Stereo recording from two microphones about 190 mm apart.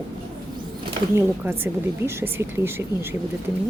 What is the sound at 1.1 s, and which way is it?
A woman's voice, 10° right (ahead or behind).